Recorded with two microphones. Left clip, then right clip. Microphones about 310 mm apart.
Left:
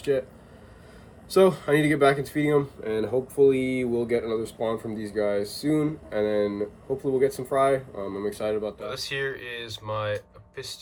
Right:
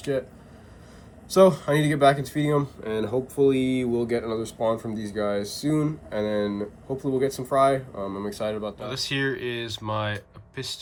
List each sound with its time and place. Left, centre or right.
0.0 s speech: centre
1.3 s speech: centre